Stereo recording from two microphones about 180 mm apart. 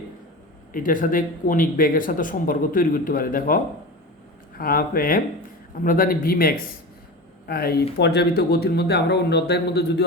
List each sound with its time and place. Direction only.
0.7 s speech: 50° left (ahead or behind); by 10.0 s 70° left (ahead or behind)